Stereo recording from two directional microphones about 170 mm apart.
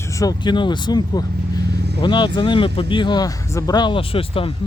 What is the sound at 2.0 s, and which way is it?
Speech, 25° left (ahead or behind).